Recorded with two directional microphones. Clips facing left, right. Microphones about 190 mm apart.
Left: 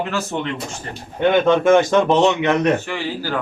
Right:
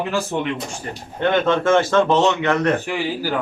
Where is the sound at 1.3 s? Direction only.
15° left (ahead or behind).